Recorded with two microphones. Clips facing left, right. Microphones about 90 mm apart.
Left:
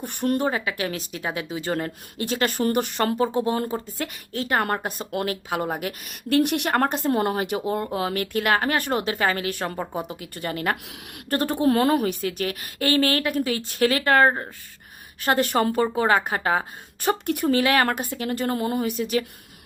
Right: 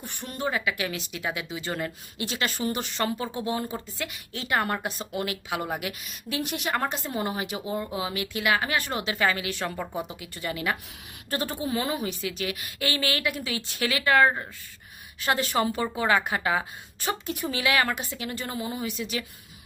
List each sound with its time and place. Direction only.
0.0 s a woman's voice: 60° left (ahead or behind)
0.5 s a woman's voice: 35° left (ahead or behind)
6.1 s speech: 60° left (ahead or behind)
10.8 s speech: 65° left (ahead or behind); by 14.4 s 40° left (ahead or behind)
15.2 s speech: 55° left (ahead or behind)
16.0 s speech: 40° left (ahead or behind)
17.2 s a woman's voice: 60° left (ahead or behind)
17.6 s speech: 45° left (ahead or behind)